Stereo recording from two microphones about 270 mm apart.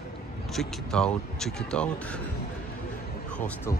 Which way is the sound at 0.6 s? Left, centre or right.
Centre.